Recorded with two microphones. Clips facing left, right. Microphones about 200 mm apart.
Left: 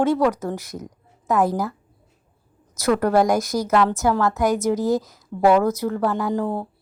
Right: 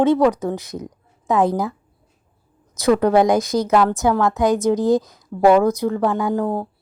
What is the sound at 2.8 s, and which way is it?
Speech, 20° right (ahead or behind).